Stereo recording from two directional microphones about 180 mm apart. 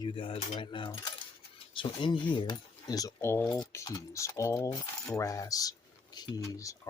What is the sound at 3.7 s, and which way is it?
Coin, 20° left (ahead or behind).